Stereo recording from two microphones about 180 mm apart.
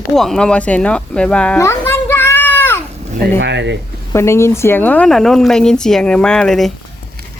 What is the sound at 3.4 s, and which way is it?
Speech, 80° right.